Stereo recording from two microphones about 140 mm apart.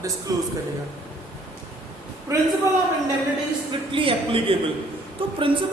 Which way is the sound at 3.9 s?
40° right (ahead or behind).